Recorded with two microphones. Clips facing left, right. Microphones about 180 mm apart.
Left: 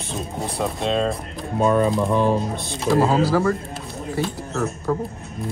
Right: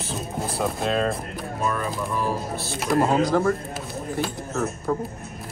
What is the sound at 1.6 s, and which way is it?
Speech, 30° left (ahead or behind).